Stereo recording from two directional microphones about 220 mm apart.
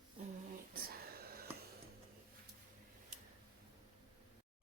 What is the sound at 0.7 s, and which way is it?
Whispering, 45° right (ahead or behind).